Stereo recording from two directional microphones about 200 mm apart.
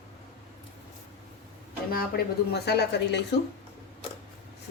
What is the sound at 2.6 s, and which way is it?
Speech, 60° left (ahead or behind).